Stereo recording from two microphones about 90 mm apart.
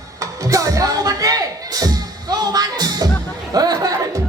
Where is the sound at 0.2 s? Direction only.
35° right (ahead or behind).